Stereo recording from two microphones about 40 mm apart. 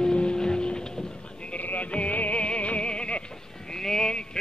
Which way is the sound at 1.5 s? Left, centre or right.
Left.